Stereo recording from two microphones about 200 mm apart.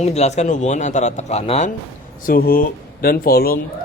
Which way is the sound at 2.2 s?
45° left (ahead or behind).